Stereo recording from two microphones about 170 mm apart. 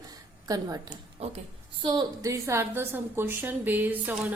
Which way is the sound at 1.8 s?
25° right (ahead or behind).